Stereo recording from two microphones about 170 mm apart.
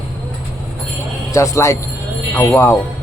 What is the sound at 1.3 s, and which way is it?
Speech, 15° left (ahead or behind).